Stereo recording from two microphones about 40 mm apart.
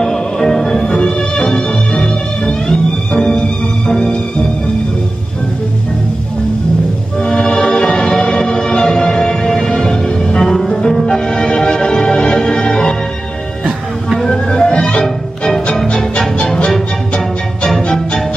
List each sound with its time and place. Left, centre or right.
0.0 s music: centre
7.2 s music: centre
14.2 s music: centre
16.0 s music: centre